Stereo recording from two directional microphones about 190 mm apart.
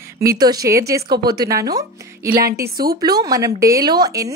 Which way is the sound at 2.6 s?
55° right (ahead or behind).